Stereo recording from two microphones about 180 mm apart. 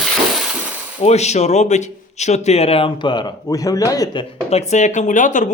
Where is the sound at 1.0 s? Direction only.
35° left (ahead or behind).